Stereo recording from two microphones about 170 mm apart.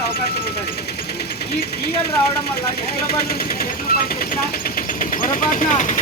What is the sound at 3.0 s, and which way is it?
Speech, 60° left (ahead or behind).